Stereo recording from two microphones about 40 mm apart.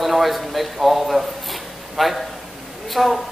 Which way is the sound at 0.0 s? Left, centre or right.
Centre.